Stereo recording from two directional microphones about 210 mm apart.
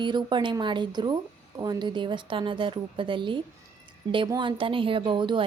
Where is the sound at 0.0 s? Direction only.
20° right (ahead or behind).